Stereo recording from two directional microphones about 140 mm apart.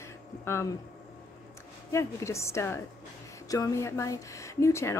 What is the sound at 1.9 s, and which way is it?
Speech, 20° left (ahead or behind).